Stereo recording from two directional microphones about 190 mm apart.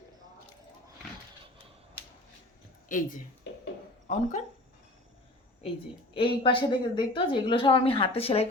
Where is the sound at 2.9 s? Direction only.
45° left (ahead or behind).